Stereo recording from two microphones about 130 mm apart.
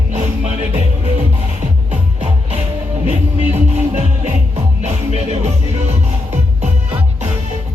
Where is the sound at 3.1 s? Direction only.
55° right (ahead or behind).